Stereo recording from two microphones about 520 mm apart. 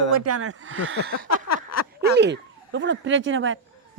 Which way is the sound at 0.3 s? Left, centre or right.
Right.